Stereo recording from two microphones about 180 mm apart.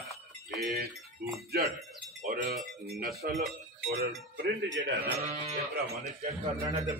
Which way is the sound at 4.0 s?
60° right (ahead or behind).